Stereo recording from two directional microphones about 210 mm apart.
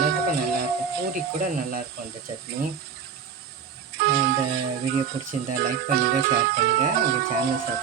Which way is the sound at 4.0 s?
50° right (ahead or behind).